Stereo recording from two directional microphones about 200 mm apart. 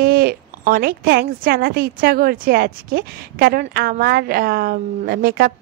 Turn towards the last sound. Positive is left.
turn(degrees=-50)  # may be behind; listen again after turning